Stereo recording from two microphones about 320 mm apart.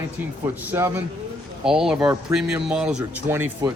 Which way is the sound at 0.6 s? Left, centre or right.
Centre.